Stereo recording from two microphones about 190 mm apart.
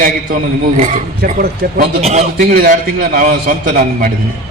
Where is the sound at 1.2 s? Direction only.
50° right (ahead or behind).